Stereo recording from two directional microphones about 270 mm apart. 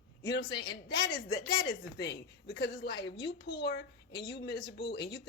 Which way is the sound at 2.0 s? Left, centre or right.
Left.